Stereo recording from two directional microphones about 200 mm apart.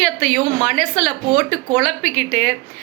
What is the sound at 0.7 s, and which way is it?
A woman's voice, 5° left (ahead or behind).